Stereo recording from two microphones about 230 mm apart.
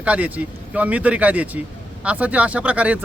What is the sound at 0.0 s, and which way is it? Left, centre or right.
A man's voice, centre.